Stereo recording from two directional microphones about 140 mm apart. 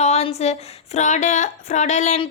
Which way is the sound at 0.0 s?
50° left (ahead or behind).